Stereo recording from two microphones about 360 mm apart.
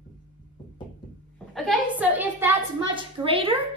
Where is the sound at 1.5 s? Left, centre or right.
Centre.